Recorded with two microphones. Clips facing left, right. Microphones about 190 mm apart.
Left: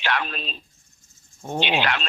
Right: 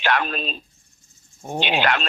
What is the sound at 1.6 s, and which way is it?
Speech, 50° right (ahead or behind).